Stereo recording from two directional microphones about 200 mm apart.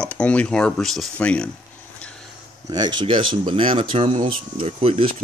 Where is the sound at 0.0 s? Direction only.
5° left (ahead or behind).